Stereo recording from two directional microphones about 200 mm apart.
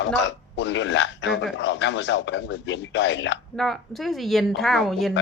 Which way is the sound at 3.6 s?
Centre (ahead or behind).